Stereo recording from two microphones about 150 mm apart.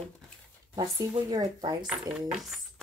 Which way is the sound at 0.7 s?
25° right (ahead or behind).